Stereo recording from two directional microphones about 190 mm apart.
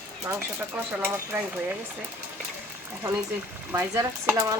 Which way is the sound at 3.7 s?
15° right (ahead or behind).